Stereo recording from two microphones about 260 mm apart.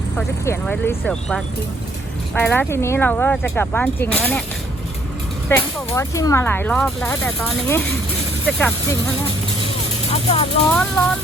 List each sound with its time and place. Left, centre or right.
0.2 s speech: centre
5.5 s speech: centre
10.1 s speech: left
10.7 s speech: centre